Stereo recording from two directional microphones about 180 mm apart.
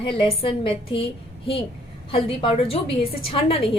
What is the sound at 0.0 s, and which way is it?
Speech, 30° left (ahead or behind).